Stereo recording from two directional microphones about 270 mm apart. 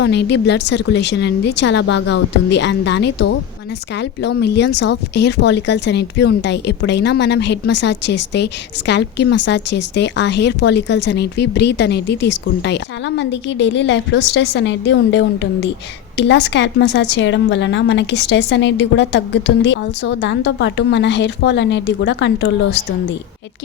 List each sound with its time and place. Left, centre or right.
0.0 s speech: left